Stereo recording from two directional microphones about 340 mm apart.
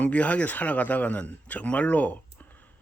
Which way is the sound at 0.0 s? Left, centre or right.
Centre.